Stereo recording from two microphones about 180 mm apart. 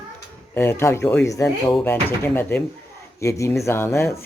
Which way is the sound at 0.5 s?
10° left (ahead or behind).